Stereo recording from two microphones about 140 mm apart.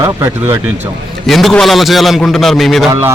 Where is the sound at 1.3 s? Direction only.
Centre (ahead or behind).